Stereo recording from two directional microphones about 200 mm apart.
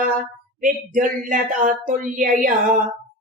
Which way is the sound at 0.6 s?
40° right (ahead or behind).